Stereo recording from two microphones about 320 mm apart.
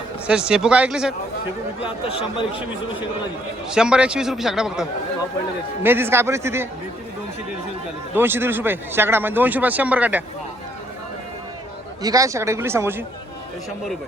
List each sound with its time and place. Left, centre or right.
0.3 s a man's voice: centre
1.8 s speech: centre
3.7 s a man's voice: centre
8.1 s speech: centre
12.0 s speech: centre